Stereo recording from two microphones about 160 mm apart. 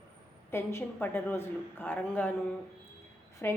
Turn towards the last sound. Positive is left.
turn(degrees=15)  # may be behind; listen again after turning